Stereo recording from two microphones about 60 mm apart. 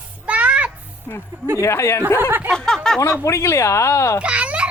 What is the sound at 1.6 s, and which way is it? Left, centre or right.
Speech, left.